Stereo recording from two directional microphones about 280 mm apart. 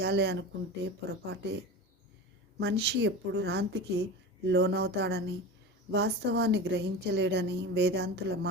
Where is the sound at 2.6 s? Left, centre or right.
Right.